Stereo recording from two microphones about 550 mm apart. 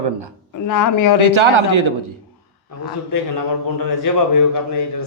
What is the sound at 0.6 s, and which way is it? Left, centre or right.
Speech, left.